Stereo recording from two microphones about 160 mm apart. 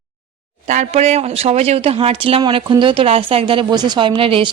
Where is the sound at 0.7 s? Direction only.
45° right (ahead or behind).